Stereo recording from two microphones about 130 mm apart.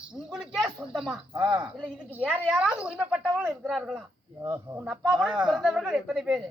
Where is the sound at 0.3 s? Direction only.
Centre (ahead or behind).